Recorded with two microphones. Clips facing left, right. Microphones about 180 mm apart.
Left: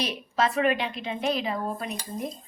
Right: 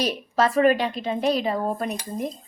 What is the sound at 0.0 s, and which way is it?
A woman's voice, 40° right (ahead or behind).